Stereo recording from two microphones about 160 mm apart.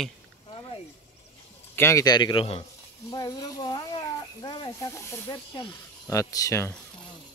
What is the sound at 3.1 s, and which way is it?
Speech, 25° left (ahead or behind).